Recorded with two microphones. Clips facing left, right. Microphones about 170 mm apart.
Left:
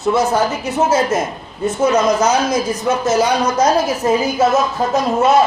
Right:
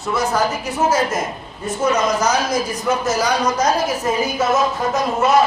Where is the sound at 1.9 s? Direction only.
25° left (ahead or behind).